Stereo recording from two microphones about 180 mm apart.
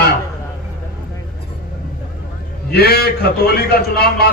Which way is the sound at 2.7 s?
60° left (ahead or behind).